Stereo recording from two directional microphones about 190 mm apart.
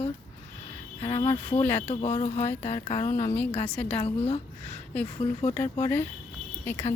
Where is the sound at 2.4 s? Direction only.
10° left (ahead or behind).